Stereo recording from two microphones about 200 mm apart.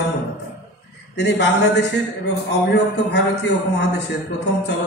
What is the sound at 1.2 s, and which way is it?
A man's voice, 60° left (ahead or behind).